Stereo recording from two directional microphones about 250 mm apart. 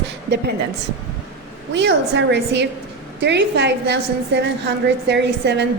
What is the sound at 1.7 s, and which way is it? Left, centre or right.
A woman's voice, right.